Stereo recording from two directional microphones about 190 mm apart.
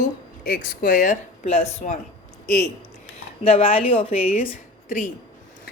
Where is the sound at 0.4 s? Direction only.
55° left (ahead or behind); by 2.0 s 35° left (ahead or behind).